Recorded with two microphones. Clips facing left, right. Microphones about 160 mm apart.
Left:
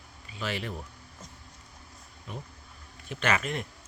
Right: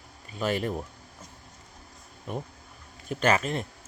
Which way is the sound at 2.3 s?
50° right (ahead or behind).